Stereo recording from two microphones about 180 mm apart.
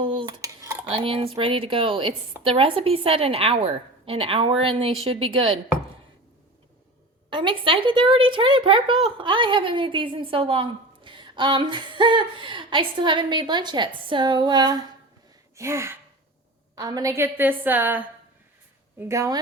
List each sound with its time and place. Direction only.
0.0 s dishes: 25° right (ahead or behind)
0.9 s a woman's voice: 30° right (ahead or behind)
7.3 s a woman's voice: 25° right (ahead or behind)